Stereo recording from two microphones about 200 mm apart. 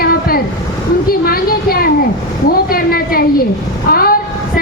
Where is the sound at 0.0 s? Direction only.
50° left (ahead or behind).